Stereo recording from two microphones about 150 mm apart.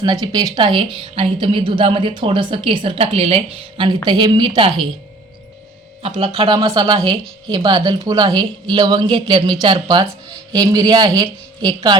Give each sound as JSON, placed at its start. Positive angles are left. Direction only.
{"t": 0.0, "sound": "a woman's voice", "side_deg": -25}
{"t": 6.0, "sound": "speech", "side_deg": -40}
{"t": 6.3, "sound": "a woman's voice", "side_deg": -30}